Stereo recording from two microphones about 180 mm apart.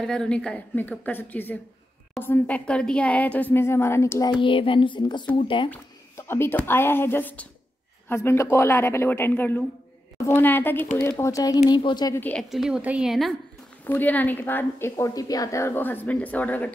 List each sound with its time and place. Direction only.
0.0 s a woman's voice: 5° left (ahead or behind); by 5.2 s 25° left (ahead or behind)
5.7 s a woman's voice: 15° left (ahead or behind)
12.2 s a woman's voice: 5° left (ahead or behind)
13.8 s a woman's voice: 10° left (ahead or behind)